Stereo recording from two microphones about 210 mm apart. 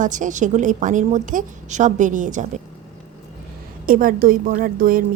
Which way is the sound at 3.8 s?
40° right (ahead or behind).